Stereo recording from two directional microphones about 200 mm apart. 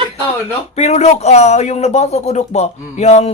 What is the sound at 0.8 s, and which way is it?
A man's voice, 35° left (ahead or behind).